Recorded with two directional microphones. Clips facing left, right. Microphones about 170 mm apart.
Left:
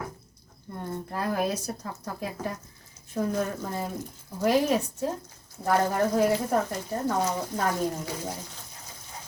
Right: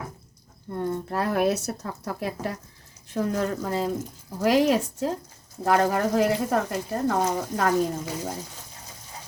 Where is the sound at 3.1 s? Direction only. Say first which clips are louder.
Right 2 dB; 90° right.